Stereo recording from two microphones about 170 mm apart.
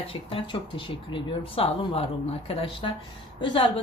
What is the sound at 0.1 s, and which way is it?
Speech, 30° left (ahead or behind).